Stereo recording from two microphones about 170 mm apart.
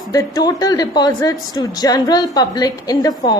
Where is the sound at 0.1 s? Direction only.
20° left (ahead or behind).